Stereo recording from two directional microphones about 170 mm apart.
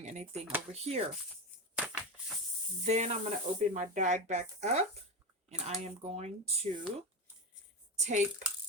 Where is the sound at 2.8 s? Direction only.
40° right (ahead or behind).